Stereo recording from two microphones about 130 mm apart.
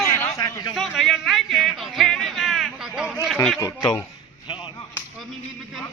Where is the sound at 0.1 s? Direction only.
20° left (ahead or behind).